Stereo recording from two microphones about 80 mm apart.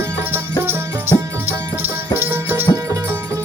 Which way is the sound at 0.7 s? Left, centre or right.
Right.